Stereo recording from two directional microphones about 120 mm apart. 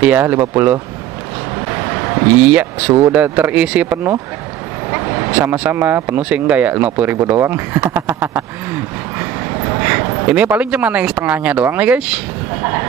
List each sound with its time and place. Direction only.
0.0 s speech: 15° right (ahead or behind)
1.9 s a sound: 20° right (ahead or behind)
2.3 s speech: 15° right (ahead or behind)